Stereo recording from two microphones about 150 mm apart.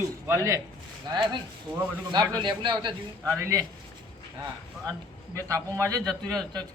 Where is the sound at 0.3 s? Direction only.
20° right (ahead or behind).